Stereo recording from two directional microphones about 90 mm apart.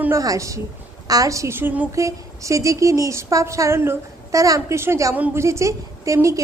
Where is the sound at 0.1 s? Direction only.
40° right (ahead or behind); by 1.9 s 20° right (ahead or behind).